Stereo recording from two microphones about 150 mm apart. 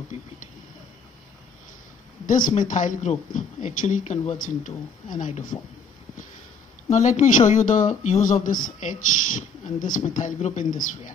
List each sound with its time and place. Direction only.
2.2 s speech: 60° left (ahead or behind)
4.4 s speech: 60° left (ahead or behind)
6.9 s speech: 50° left (ahead or behind)